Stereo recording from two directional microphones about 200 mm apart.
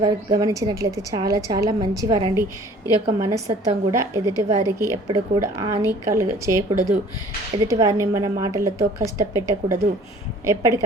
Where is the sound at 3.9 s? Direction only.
15° right (ahead or behind).